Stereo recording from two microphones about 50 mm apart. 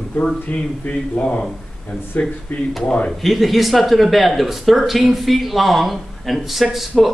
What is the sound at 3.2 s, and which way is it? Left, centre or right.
Speech, centre.